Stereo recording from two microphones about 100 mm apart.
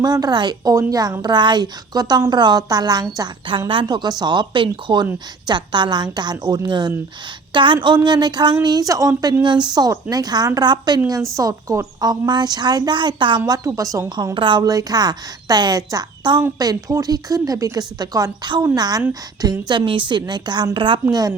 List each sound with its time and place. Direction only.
0.0 s a woman's voice: 40° right (ahead or behind)
3.7 s a woman's voice: 55° right (ahead or behind); by 9.3 s 35° right (ahead or behind)
9.4 s a woman's voice: 50° right (ahead or behind)
13.4 s a woman's voice: 40° right (ahead or behind)
14.3 s a woman's voice: 55° right (ahead or behind)
20.7 s a woman's voice: 60° right (ahead or behind)
21.1 s a woman's voice: 40° right (ahead or behind)